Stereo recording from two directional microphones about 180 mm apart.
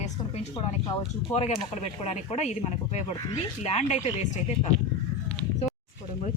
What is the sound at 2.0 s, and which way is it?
Speech, 35° left (ahead or behind).